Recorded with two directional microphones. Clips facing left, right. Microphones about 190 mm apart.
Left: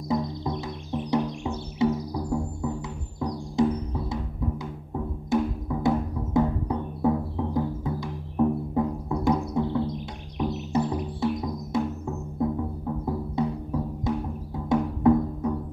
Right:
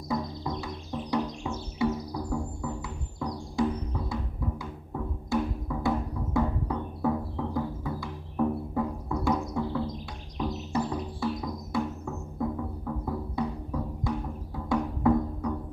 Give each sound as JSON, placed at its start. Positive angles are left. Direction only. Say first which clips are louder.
{"t": 0.1, "sound": "music", "louder": "left 4 dB", "side_deg": 20}
{"t": 5.3, "sound": "music", "louder": "left 4 dB", "side_deg": 20}
{"t": 14.7, "sound": "music", "louder": "left 4 dB", "side_deg": 20}